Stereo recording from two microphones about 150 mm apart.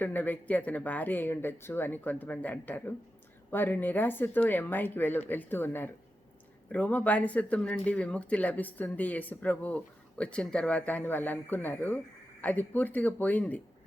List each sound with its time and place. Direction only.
0.0 s speech: 10° left (ahead or behind)